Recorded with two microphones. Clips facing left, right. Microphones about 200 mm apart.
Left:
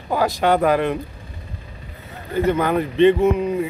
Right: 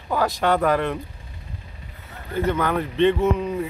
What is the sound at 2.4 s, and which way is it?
Speech, 15° left (ahead or behind).